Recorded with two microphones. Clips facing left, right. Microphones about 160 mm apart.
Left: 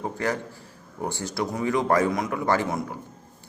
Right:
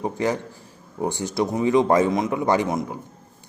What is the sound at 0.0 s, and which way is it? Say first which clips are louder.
A man's voice: right 4 dB; 20° right (ahead or behind).